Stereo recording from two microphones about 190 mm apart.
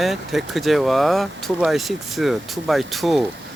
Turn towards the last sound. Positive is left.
turn(degrees=0)  # may be behind; listen again after turning